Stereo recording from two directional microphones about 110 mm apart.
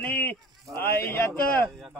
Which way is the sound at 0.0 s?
15° left (ahead or behind).